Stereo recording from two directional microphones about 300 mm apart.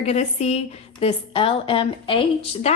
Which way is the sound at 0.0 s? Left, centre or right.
Left.